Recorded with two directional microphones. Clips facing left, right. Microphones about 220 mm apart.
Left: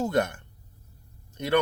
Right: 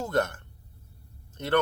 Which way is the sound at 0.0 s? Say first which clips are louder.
Left 2 dB; 15° left (ahead or behind).